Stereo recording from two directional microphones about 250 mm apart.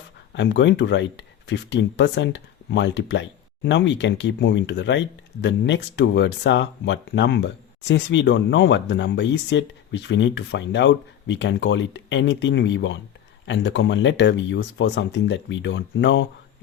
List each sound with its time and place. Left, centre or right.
0.3 s speech: left